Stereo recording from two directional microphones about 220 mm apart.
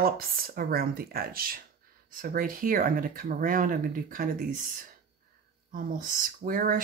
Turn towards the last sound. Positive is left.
turn(degrees=-40)  # may be behind; listen again after turning